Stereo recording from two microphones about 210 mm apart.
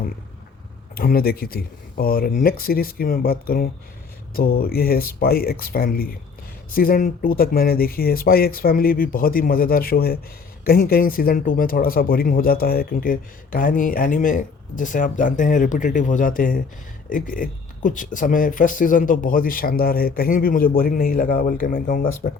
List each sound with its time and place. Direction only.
0.9 s a man's voice: 45° left (ahead or behind)